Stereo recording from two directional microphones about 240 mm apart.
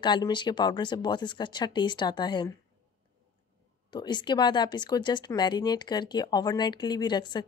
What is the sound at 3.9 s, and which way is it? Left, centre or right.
Speech, centre.